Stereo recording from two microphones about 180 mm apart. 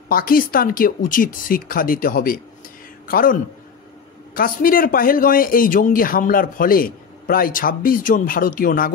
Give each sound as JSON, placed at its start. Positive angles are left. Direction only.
{"t": 0.1, "sound": "a man's voice", "side_deg": 55}